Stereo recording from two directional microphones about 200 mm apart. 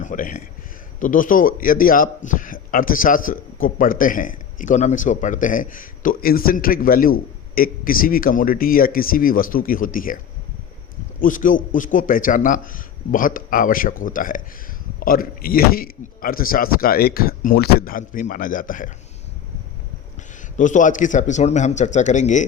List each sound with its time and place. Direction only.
0.0 s a man's voice: 40° left (ahead or behind)
11.2 s a man's voice: 40° left (ahead or behind)
20.6 s speech: 40° left (ahead or behind)